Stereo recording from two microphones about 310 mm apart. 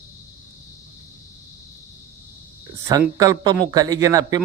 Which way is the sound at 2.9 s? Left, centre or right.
Centre.